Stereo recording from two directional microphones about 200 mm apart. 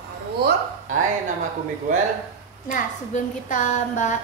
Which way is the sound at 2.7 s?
40° left (ahead or behind).